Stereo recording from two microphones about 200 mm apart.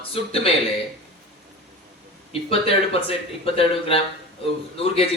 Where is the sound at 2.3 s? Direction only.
30° left (ahead or behind).